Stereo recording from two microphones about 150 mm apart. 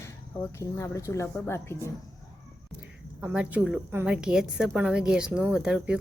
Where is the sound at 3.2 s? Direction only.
10° right (ahead or behind).